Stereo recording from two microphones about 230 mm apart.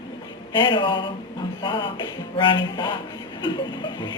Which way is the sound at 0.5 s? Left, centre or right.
Left.